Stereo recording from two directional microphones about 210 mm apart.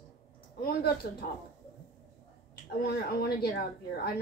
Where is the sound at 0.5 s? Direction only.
45° left (ahead or behind).